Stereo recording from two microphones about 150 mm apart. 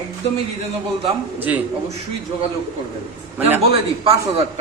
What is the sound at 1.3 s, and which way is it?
Speech, 10° right (ahead or behind).